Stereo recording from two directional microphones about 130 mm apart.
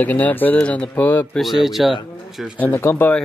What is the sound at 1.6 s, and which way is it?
Speech, centre (ahead or behind).